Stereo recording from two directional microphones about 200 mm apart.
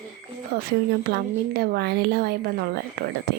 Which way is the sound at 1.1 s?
55° right (ahead or behind).